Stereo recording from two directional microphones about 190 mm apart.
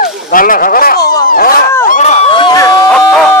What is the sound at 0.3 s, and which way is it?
Speech, 45° left (ahead or behind).